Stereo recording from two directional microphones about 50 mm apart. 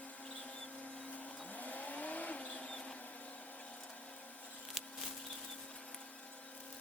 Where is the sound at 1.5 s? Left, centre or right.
Left.